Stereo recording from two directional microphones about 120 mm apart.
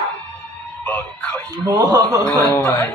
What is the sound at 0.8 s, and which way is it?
Speech, 15° left (ahead or behind).